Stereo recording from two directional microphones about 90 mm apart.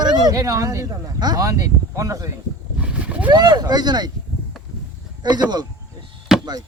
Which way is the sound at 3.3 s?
50° right (ahead or behind).